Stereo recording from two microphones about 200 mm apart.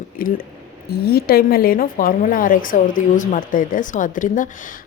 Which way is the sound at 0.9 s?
50° left (ahead or behind).